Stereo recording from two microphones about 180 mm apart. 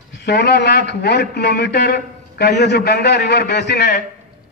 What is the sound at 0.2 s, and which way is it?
A man's voice, 70° left (ahead or behind).